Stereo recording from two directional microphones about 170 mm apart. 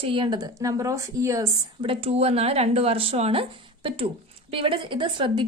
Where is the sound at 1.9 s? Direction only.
35° right (ahead or behind).